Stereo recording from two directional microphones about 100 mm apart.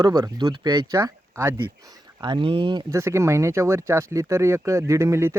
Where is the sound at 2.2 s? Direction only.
55° right (ahead or behind).